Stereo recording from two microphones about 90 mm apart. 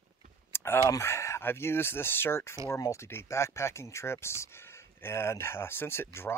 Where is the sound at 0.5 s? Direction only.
25° left (ahead or behind).